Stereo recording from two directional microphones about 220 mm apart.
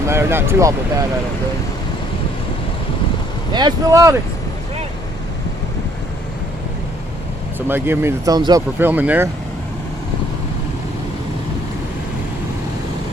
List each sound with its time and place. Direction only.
0.1 s speech: 10° right (ahead or behind)
3.5 s speech: 20° right (ahead or behind)
7.7 s speech: 10° right (ahead or behind)